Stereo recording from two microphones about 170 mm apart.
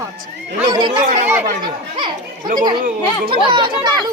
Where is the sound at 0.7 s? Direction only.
25° right (ahead or behind).